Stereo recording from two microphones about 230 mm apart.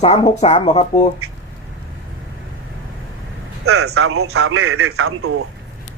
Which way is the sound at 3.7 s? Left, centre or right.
Right.